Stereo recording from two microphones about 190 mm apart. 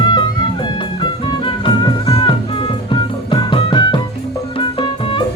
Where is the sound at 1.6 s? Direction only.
25° left (ahead or behind).